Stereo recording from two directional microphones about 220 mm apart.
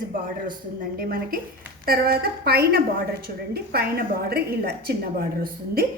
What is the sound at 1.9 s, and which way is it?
Speech, 45° right (ahead or behind).